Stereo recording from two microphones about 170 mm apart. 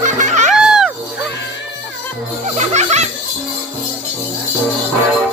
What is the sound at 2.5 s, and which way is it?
Music, 40° right (ahead or behind).